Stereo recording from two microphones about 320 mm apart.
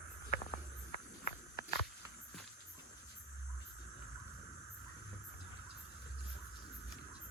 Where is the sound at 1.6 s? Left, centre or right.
Left.